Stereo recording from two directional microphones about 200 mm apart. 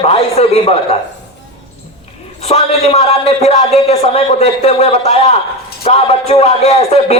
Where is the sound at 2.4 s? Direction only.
30° left (ahead or behind).